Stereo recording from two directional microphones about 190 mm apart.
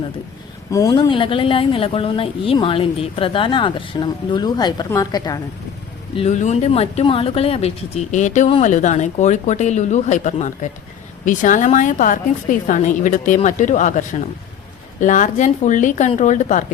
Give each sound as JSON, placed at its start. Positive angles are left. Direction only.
{"t": 0.7, "sound": "a woman's voice", "side_deg": 15}
{"t": 6.1, "sound": "speech", "side_deg": 35}